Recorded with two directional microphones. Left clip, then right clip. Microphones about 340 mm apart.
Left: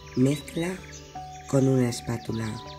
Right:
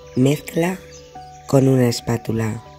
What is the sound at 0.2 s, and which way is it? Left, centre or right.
Speech, right.